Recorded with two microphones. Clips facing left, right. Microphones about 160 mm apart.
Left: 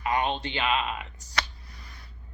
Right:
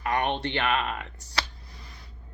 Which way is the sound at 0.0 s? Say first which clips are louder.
Even; 65° right (ahead or behind).